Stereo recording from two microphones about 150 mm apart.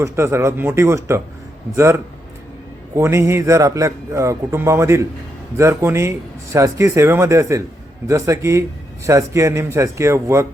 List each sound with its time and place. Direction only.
0.0 s a man's voice: 20° right (ahead or behind)